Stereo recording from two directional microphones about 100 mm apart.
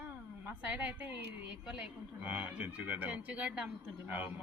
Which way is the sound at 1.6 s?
10° right (ahead or behind).